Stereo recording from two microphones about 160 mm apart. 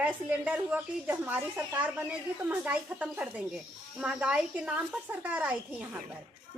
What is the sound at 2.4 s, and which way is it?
A woman's voice, 10° right (ahead or behind).